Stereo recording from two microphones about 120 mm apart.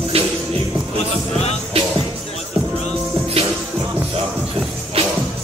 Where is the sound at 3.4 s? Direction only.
55° right (ahead or behind).